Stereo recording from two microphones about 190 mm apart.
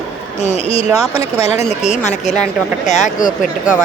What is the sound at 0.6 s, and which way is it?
Speech, 30° left (ahead or behind).